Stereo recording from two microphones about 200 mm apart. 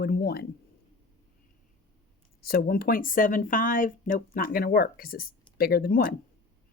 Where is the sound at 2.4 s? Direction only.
50° left (ahead or behind).